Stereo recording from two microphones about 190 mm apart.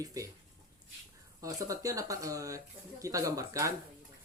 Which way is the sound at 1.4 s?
15° right (ahead or behind).